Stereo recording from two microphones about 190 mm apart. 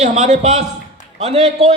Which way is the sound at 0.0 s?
40° right (ahead or behind).